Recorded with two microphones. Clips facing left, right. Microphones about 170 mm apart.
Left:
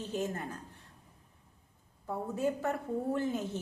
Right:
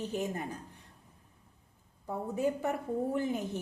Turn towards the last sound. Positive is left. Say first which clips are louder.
# even
turn(degrees=-15)  # may be behind; listen again after turning